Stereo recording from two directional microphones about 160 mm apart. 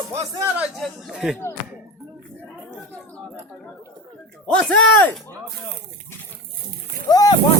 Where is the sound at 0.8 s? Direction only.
Centre (ahead or behind).